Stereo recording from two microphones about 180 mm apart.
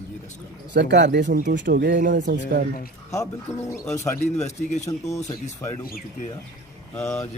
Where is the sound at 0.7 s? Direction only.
70° right (ahead or behind).